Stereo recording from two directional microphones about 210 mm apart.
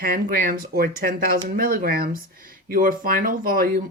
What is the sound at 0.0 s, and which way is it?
Speech, 45° right (ahead or behind).